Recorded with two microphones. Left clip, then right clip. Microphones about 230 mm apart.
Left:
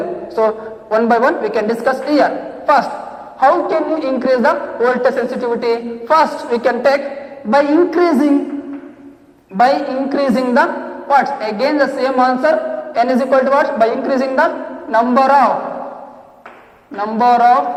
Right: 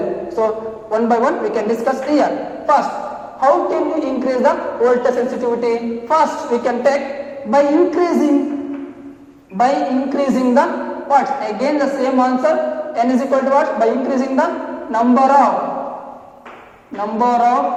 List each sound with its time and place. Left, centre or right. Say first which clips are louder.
0.3 s a man's voice: left 4 dB; left
9.6 s a man's voice: left 2 dB; left
17.0 s a man's voice: left 3 dB; left